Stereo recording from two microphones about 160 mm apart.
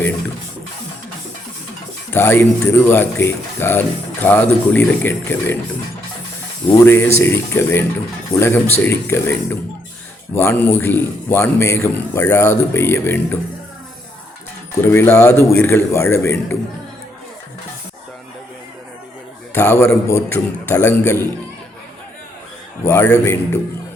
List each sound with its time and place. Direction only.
2.1 s speech: 15° left (ahead or behind)
6.7 s speech: 15° left (ahead or behind)
14.8 s speech: 15° left (ahead or behind)
19.5 s speech: 15° left (ahead or behind)
22.9 s speech: 15° left (ahead or behind)